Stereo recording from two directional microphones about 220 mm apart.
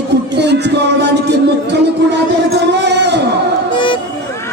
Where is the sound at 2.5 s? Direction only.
50° right (ahead or behind).